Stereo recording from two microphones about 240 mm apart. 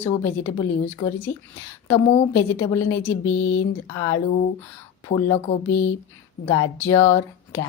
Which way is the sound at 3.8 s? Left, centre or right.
Centre.